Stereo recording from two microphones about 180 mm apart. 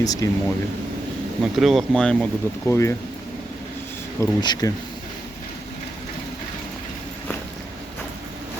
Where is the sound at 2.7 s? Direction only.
15° left (ahead or behind).